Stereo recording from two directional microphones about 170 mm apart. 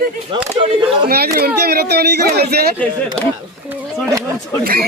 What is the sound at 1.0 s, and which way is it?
Speech, 65° right (ahead or behind).